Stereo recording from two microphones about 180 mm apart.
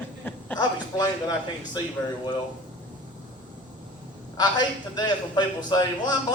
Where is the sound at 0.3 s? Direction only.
10° left (ahead or behind).